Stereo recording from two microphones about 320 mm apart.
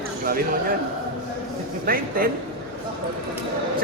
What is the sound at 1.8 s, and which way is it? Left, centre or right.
Speech, right.